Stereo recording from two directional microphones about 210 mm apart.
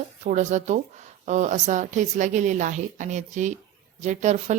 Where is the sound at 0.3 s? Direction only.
35° right (ahead or behind).